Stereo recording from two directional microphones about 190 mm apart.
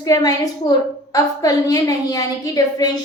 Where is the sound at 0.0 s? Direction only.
20° left (ahead or behind).